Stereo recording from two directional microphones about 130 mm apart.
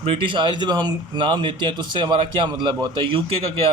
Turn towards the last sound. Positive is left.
turn(degrees=-45)  # may be behind; listen again after turning